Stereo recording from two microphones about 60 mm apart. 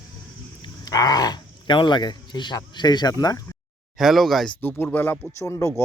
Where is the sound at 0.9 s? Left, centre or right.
Left.